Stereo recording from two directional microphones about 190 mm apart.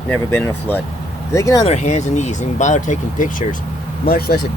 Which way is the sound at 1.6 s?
35° left (ahead or behind).